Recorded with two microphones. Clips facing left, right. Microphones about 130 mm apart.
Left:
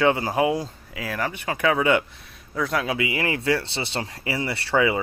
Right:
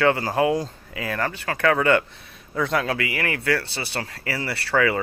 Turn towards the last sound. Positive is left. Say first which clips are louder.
# even
turn(degrees=20)  # may be behind; listen again after turning